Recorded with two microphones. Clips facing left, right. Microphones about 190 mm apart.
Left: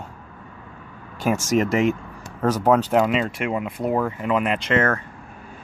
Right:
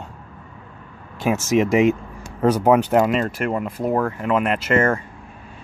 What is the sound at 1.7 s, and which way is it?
Vehicle, 15° right (ahead or behind).